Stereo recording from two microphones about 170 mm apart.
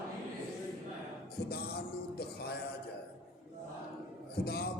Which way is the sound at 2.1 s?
65° left (ahead or behind).